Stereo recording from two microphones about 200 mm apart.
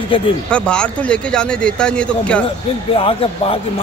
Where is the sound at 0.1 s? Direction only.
25° left (ahead or behind).